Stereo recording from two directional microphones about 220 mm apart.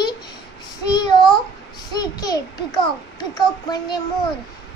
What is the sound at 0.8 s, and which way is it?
Child singing, 20° left (ahead or behind).